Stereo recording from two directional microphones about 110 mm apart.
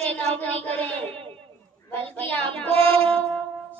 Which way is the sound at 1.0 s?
60° right (ahead or behind).